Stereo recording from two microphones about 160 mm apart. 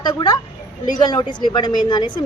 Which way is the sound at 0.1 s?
30° left (ahead or behind).